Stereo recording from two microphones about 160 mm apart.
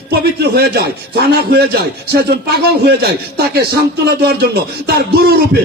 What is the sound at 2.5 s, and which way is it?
A man's voice, 90° right.